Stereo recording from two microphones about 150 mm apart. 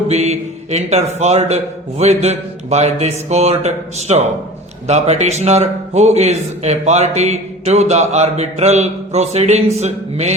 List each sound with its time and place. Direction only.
0.1 s a man's voice: 45° right (ahead or behind)